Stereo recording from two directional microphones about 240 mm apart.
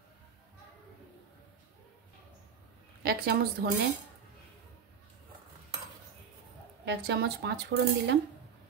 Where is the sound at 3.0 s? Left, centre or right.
Right.